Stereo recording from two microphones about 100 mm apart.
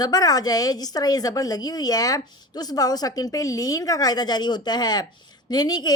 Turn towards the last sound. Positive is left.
turn(degrees=45)  # may be behind; listen again after turning